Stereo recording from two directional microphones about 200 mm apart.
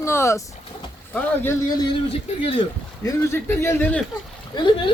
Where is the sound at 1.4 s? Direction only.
15° left (ahead or behind).